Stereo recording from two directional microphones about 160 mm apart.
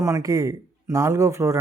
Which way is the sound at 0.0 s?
20° right (ahead or behind).